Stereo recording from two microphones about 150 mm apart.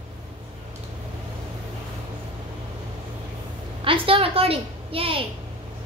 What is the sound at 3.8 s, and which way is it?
A woman's voice, 35° right (ahead or behind).